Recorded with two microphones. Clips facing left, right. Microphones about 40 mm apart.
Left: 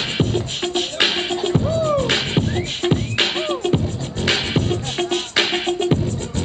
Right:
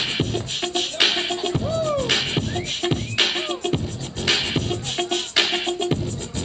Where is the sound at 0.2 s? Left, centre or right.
Centre.